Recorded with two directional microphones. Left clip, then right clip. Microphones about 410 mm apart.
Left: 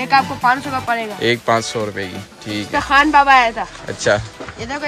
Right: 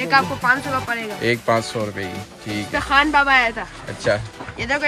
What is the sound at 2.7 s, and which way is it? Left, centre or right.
Speech, centre.